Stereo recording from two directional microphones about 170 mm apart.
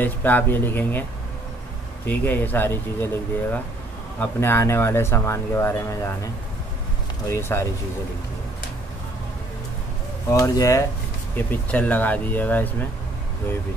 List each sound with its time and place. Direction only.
0.0 s speech: 10° left (ahead or behind)
2.0 s speech: 10° left (ahead or behind)
7.2 s speech: 15° left (ahead or behind)
10.3 s speech: 20° left (ahead or behind)